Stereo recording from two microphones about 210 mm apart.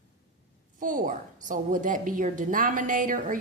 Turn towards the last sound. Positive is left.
turn(degrees=-40)  # may be behind; listen again after turning